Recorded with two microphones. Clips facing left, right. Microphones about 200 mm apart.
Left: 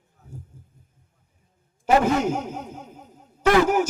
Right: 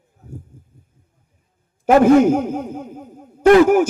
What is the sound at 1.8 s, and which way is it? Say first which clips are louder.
A man's voice: right 9 dB; 55° right (ahead or behind).